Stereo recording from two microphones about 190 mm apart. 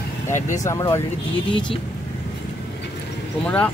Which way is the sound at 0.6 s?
15° left (ahead or behind).